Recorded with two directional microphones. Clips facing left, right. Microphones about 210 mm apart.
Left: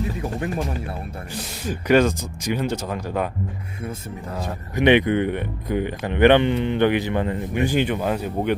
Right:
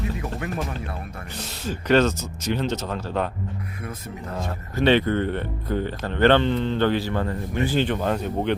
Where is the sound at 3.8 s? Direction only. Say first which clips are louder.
Left 3 dB; 25° left (ahead or behind).